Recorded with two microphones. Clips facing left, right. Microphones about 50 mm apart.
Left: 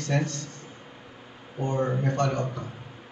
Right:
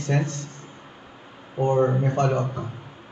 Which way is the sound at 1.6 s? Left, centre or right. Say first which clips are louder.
Right 6 dB; right.